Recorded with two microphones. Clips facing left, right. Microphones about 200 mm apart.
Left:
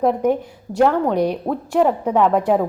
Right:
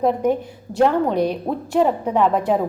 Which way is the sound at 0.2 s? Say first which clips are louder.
Left 1 dB; 15° left (ahead or behind).